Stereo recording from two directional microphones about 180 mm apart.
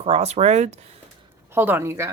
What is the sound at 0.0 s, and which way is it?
Speech, 35° right (ahead or behind).